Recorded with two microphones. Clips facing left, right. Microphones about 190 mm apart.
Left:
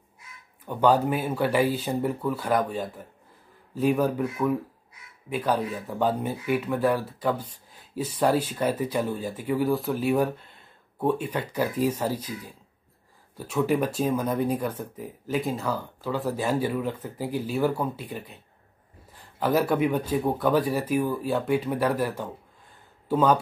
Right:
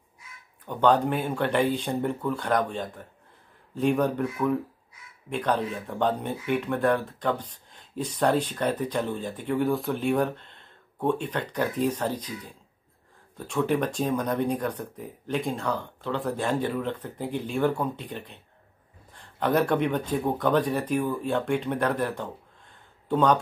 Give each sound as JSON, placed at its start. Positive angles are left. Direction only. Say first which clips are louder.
{"t": 0.7, "sound": "speech", "louder": "left 1 dB", "side_deg": 5}